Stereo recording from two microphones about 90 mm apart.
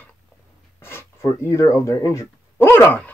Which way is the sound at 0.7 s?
25° left (ahead or behind).